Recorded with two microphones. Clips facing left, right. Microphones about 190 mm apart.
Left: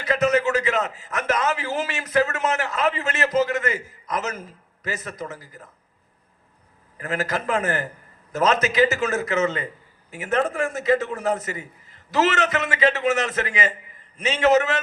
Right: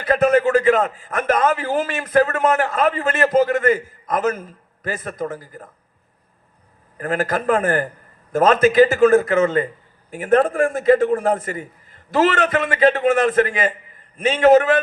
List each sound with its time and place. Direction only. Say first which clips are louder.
0.0 s a man's voice: right 5 dB; 50° right (ahead or behind)
6.9 s a man's voice: right 5 dB; 50° right (ahead or behind)